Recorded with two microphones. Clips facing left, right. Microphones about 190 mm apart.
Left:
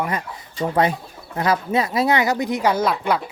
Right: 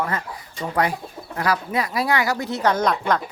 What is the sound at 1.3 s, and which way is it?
Speech, 25° left (ahead or behind).